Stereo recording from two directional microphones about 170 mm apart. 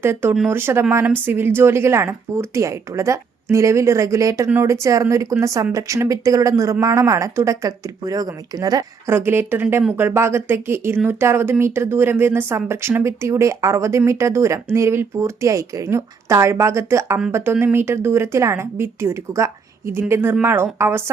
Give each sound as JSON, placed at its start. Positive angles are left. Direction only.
{"t": 0.0, "sound": "speech", "side_deg": -15}